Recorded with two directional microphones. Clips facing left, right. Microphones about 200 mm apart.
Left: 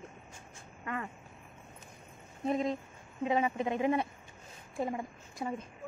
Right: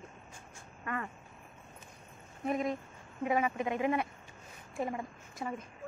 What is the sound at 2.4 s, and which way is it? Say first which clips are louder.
A woman's voice: left 1 dB; 25° left (ahead or behind).